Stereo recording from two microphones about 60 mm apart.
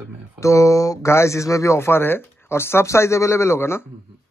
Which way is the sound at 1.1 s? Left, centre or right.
Left.